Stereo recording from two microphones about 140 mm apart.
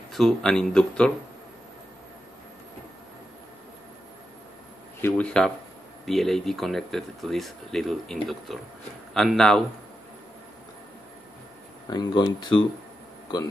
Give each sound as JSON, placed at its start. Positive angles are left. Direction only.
{"t": 0.1, "sound": "speech", "side_deg": 5}
{"t": 5.0, "sound": "speech", "side_deg": 10}
{"t": 11.9, "sound": "speech", "side_deg": 35}